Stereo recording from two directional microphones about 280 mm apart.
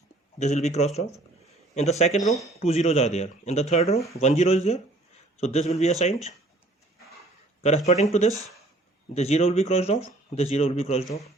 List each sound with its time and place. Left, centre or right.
0.3 s speech: left
2.2 s speech: centre
2.6 s speech: left
7.9 s speech: left